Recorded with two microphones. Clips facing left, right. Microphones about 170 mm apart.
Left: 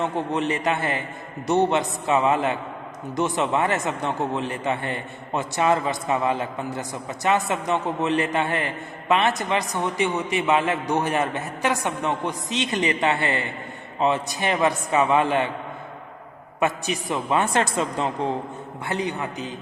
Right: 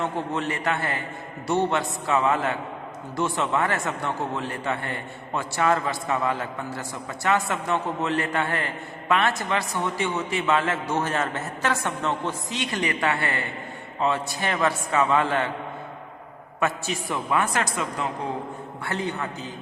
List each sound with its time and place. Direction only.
0.0 s a man's voice: 20° left (ahead or behind)
16.6 s a man's voice: 20° left (ahead or behind)
18.9 s a man's voice: 15° left (ahead or behind)